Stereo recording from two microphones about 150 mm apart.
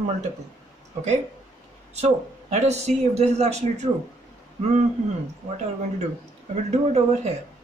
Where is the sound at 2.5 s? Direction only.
50° right (ahead or behind).